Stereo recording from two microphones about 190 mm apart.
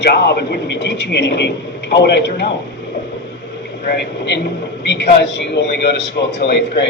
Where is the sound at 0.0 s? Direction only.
60° left (ahead or behind).